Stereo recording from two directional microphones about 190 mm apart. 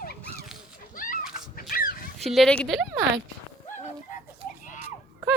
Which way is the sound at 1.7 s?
50° left (ahead or behind).